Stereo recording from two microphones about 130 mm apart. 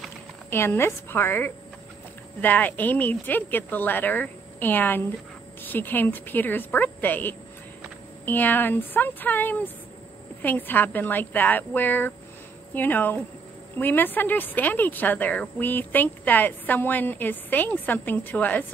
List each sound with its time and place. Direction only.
0.5 s speech: 20° left (ahead or behind)